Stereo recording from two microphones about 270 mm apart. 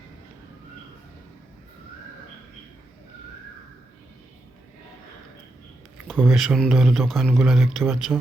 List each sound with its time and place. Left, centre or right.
6.1 s a man's voice: centre